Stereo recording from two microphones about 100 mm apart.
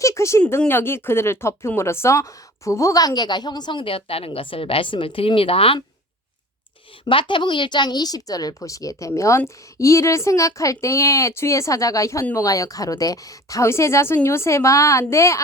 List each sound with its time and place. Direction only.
0.0 s speech: 30° left (ahead or behind); by 5.8 s 65° left (ahead or behind)
7.0 s a woman's voice: 55° left (ahead or behind); by 15.4 s 30° left (ahead or behind)